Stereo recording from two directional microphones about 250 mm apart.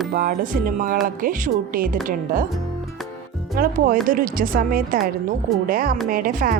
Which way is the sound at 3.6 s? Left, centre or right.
Right.